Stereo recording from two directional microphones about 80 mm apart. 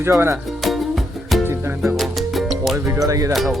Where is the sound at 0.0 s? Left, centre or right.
Right.